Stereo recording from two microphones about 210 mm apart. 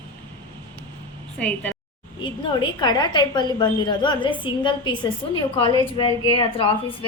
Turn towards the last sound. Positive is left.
turn(degrees=25)  # may be behind; listen again after turning